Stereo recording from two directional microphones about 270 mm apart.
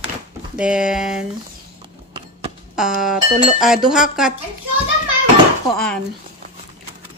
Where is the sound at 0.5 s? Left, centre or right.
Centre.